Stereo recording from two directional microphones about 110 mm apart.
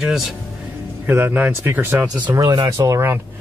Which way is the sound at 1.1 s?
15° right (ahead or behind).